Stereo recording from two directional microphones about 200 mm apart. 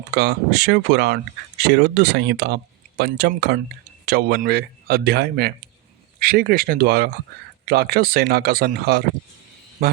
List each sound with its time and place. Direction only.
0.1 s speech: 55° right (ahead or behind)